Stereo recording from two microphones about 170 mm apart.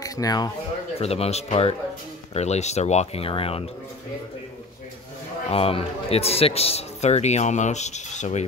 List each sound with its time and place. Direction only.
0.0 s speech: 20° left (ahead or behind)
0.9 s a man's voice: 35° left (ahead or behind)
5.5 s a man's voice: 35° left (ahead or behind)